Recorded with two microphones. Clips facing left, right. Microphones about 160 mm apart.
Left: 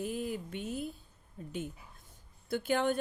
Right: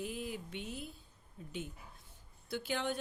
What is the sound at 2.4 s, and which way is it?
Speech, 50° left (ahead or behind).